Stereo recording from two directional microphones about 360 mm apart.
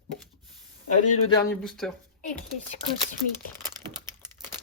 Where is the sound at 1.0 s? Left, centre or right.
Centre.